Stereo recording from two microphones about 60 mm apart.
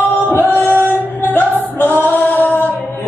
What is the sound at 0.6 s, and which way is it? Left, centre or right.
Singing, left.